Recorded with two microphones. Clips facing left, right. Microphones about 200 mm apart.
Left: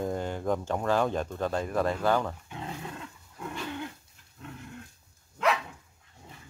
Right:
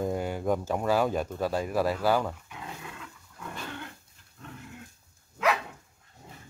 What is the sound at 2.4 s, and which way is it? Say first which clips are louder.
Dog: left 4 dB; 30° left (ahead or behind).